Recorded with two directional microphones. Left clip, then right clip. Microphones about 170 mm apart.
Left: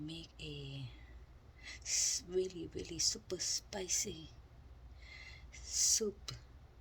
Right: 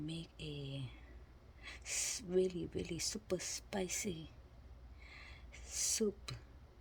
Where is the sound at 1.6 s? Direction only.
55° right (ahead or behind).